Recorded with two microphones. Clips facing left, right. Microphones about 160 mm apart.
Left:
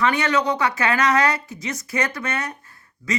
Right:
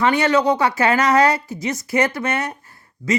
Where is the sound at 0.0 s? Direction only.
30° right (ahead or behind).